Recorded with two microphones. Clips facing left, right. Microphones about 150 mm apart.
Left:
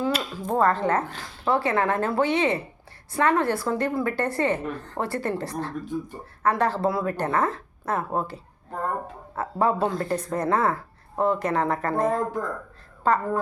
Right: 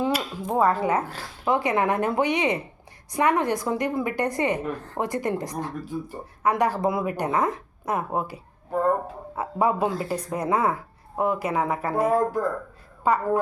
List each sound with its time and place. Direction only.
0.1 s a woman's voice: 15° right (ahead or behind)